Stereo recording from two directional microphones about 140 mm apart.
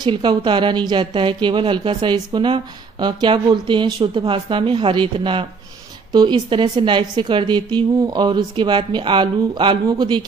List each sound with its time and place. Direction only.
0.0 s speech: 35° right (ahead or behind)